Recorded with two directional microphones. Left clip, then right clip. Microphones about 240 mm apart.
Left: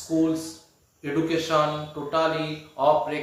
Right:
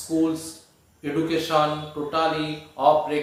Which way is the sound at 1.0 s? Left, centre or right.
Centre.